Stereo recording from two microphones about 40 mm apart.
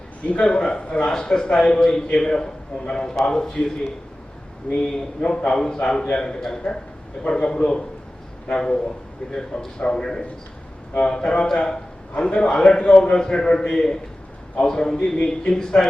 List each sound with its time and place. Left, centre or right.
0.3 s a man's voice: left